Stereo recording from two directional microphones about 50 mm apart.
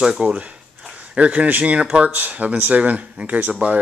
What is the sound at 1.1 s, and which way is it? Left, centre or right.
Speech, right.